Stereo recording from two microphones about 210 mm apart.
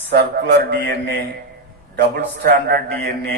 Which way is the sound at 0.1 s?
50° right (ahead or behind).